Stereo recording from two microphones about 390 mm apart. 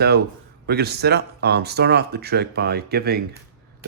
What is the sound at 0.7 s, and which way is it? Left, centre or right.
Speech, right.